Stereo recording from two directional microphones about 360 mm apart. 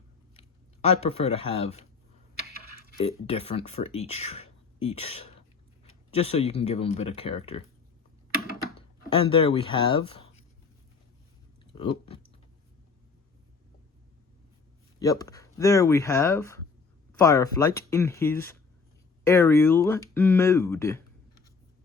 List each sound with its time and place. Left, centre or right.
0.3 s speech: centre
3.0 s speech: centre
9.0 s speech: centre
11.6 s speech: centre
14.9 s speech: centre